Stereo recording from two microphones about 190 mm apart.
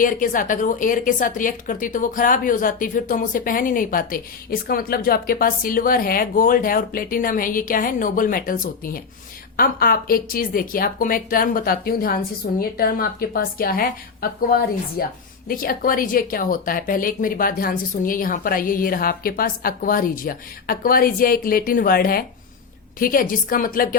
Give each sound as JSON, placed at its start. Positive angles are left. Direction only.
{"t": 0.0, "sound": "a woman's voice", "side_deg": 45}